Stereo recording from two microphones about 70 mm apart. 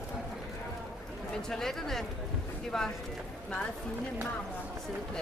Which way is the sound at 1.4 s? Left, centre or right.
Centre.